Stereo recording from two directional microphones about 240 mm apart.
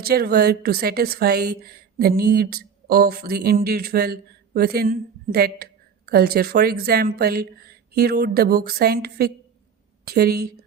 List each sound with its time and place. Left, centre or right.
0.0 s a woman's voice: right